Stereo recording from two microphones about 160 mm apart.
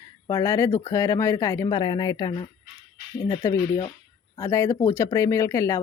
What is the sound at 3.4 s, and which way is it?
Speech, 15° left (ahead or behind).